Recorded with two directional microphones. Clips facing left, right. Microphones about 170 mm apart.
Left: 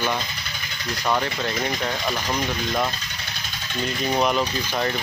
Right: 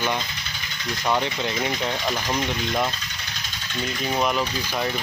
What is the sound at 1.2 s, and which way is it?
Speech, 20° right (ahead or behind).